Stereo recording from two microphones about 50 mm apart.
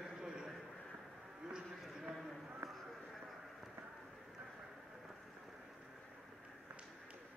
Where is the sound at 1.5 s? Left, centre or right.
Centre.